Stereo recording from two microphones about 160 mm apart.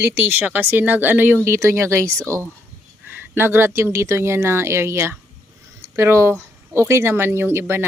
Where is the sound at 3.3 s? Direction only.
15° right (ahead or behind).